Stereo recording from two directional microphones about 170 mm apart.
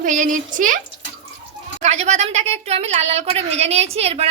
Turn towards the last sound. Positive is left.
turn(degrees=-35)  # may be behind; listen again after turning